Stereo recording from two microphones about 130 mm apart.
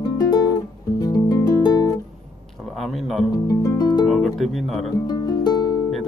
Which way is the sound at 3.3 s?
25° left (ahead or behind).